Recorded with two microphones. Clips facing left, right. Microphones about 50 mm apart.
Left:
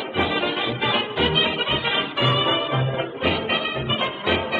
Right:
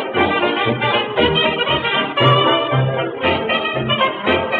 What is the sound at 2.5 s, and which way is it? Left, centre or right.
Music, centre.